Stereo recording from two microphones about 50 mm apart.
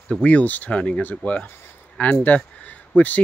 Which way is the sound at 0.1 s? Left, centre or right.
Left.